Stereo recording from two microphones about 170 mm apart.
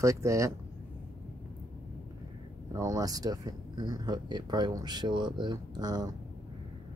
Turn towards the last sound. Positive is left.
turn(degrees=-25)  # may be behind; listen again after turning